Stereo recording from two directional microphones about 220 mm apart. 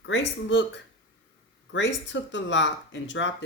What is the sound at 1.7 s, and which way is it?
A woman's voice, 55° left (ahead or behind).